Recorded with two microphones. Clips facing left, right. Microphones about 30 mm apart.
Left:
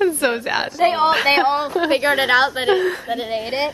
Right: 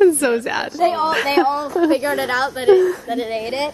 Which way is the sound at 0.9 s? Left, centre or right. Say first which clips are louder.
Left 4 dB; left.